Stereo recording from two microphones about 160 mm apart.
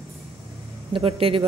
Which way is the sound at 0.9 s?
35° right (ahead or behind).